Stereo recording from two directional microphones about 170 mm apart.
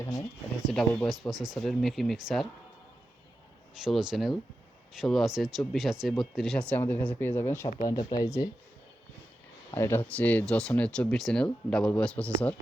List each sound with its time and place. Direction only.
0.0 s speech: 20° left (ahead or behind)
0.7 s speech: 5° left (ahead or behind)
3.8 s speech: centre (ahead or behind); by 8.4 s 20° left (ahead or behind)
9.7 s speech: 15° left (ahead or behind)